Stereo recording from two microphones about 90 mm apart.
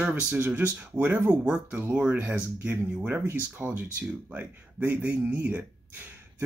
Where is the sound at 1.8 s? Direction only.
25° right (ahead or behind).